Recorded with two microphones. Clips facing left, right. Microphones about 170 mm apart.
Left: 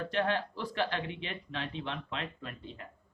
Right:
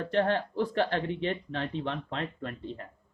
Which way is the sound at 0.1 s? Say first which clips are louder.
Right 6 dB; 50° right (ahead or behind).